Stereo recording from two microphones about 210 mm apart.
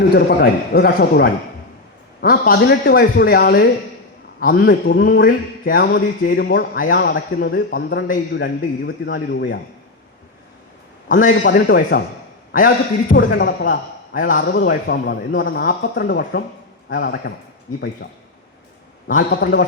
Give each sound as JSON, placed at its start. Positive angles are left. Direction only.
{"t": 0.1, "sound": "a man's voice", "side_deg": 50}
{"t": 11.1, "sound": "a man's voice", "side_deg": 40}
{"t": 11.4, "sound": "a man's voice", "side_deg": 50}
{"t": 19.3, "sound": "speech", "side_deg": 55}